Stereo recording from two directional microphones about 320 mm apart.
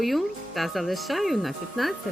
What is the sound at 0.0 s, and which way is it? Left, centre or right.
Speech, centre.